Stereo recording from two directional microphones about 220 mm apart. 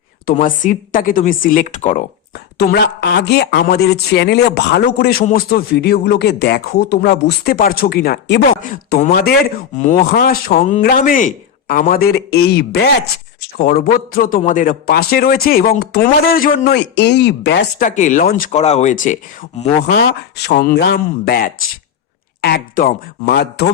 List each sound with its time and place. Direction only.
0.3 s a man's voice: 40° left (ahead or behind)
2.3 s a man's voice: 45° left (ahead or behind)
17.8 s a man's voice: 35° left (ahead or behind)
19.9 s speech: 50° left (ahead or behind)